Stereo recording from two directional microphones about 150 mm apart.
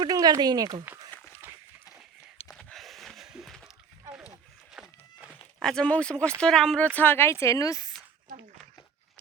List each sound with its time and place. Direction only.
0.0 s speech: 25° right (ahead or behind)
1.4 s a sound: 15° right (ahead or behind)
2.5 s a sound: centre (ahead or behind)
4.7 s walk: 5° right (ahead or behind)
5.6 s speech: 5° left (ahead or behind)
6.9 s speech: 15° left (ahead or behind)